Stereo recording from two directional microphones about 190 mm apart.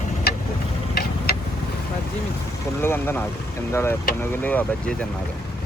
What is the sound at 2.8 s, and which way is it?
Speech, 10° left (ahead or behind).